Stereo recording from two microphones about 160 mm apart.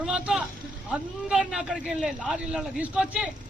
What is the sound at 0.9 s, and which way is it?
A man's voice, 5° right (ahead or behind).